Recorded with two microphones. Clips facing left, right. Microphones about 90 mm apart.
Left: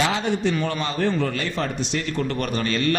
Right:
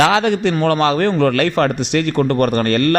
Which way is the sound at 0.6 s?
70° right (ahead or behind).